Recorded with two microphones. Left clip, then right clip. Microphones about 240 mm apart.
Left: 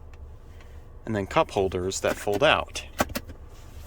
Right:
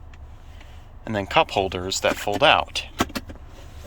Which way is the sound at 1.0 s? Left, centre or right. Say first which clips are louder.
Right 4 dB; centre.